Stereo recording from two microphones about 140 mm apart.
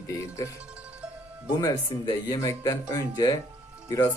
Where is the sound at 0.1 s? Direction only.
20° left (ahead or behind).